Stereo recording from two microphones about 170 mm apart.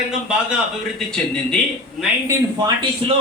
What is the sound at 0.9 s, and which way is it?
Speech, 5° left (ahead or behind).